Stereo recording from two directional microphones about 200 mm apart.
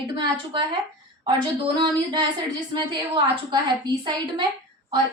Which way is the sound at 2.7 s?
20° right (ahead or behind).